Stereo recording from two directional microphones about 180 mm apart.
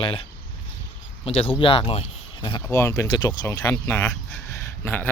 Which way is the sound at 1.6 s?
30° left (ahead or behind).